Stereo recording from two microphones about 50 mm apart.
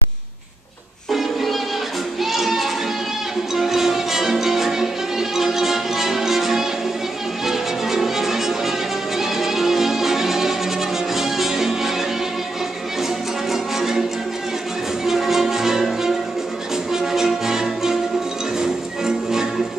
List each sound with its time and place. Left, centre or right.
1.1 s music: centre
2.2 s child singing: centre
3.5 s music: centre
13.5 s music: centre
15.0 s music: centre